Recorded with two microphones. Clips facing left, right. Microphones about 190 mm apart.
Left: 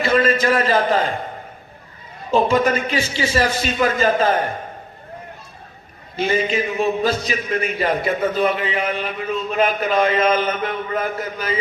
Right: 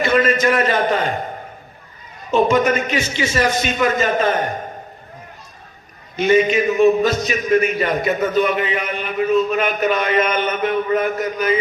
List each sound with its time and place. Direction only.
0.0 s a sound: 30° left (ahead or behind)
2.3 s a man's voice: 30° left (ahead or behind)
6.1 s a man's voice: 30° left (ahead or behind)